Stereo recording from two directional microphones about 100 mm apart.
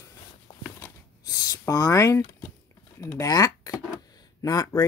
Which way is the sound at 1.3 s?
40° left (ahead or behind).